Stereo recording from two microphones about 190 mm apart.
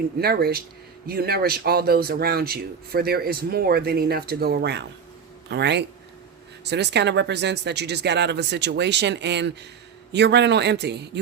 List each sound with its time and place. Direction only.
0.2 s speech: 55° right (ahead or behind)